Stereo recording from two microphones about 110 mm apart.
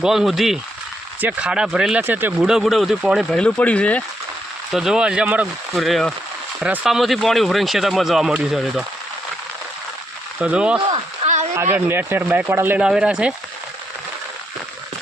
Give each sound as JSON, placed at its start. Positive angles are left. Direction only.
{"t": 0.0, "sound": "speech", "side_deg": -5}
{"t": 2.0, "sound": "speech", "side_deg": -20}
{"t": 2.4, "sound": "speech", "side_deg": -5}
{"t": 3.3, "sound": "speech", "side_deg": 10}
{"t": 4.7, "sound": "speech", "side_deg": -5}
{"t": 5.7, "sound": "speech", "side_deg": 0}
{"t": 10.4, "sound": "speech", "side_deg": -10}
{"t": 11.2, "sound": "a sound", "side_deg": -55}
{"t": 11.7, "sound": "speech", "side_deg": -20}
{"t": 12.8, "sound": "speech", "side_deg": -5}